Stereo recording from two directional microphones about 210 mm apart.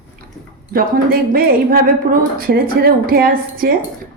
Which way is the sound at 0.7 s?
45° right (ahead or behind).